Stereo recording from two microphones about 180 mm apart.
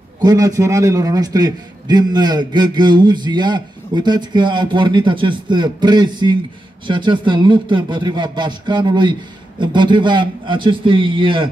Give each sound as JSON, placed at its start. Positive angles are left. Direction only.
{"t": 0.2, "sound": "a man's voice", "side_deg": -20}